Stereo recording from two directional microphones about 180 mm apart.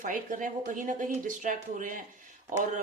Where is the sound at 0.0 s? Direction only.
45° right (ahead or behind).